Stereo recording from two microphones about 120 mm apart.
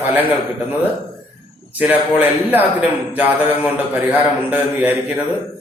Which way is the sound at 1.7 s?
15° right (ahead or behind).